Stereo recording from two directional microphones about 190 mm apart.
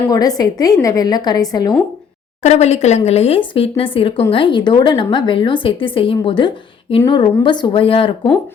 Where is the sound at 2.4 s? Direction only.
35° left (ahead or behind).